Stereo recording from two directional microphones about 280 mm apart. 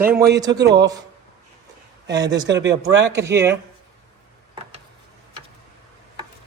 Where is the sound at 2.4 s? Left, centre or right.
Right.